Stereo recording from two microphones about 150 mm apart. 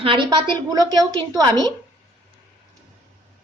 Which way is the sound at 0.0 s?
35° right (ahead or behind).